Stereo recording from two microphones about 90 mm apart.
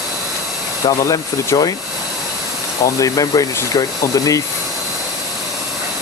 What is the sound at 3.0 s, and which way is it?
Speech, 40° left (ahead or behind).